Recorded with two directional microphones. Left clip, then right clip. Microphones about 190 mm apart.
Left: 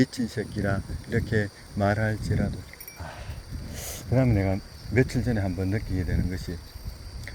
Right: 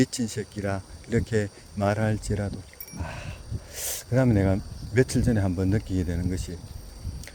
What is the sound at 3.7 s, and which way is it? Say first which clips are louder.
Speech: right 1 dB; 25° right (ahead or behind).